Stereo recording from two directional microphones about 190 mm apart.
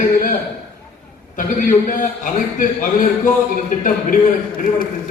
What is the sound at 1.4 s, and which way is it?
A man's voice, 45° left (ahead or behind).